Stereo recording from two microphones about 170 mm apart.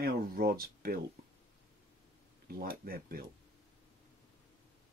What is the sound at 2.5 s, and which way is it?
Speech, 60° right (ahead or behind).